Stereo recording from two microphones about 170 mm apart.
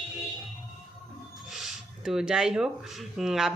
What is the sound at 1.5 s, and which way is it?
A woman's voice, centre (ahead or behind).